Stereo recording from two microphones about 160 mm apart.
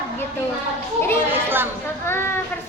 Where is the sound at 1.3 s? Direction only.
15° right (ahead or behind).